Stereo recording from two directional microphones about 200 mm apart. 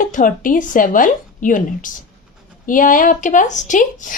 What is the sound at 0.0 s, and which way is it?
Speech, 40° left (ahead or behind).